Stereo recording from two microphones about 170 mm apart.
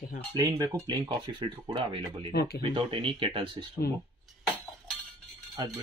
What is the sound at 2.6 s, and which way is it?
Speech, 30° right (ahead or behind).